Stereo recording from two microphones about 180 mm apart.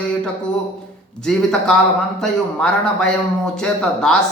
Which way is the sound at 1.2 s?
5° left (ahead or behind).